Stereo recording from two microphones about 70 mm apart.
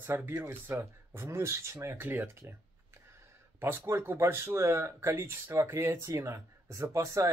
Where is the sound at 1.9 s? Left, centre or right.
Right.